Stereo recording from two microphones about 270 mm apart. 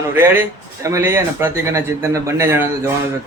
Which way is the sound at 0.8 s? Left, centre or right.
Centre.